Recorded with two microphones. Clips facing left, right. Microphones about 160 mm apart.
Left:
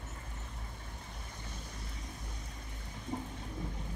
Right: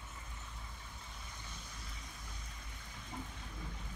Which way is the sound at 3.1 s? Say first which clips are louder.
Left 7 dB; 35° left (ahead or behind).